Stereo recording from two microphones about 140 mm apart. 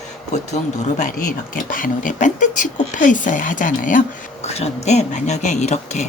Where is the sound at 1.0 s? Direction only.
75° left (ahead or behind).